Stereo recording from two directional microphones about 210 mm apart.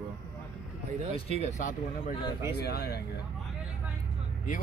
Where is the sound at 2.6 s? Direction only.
50° left (ahead or behind).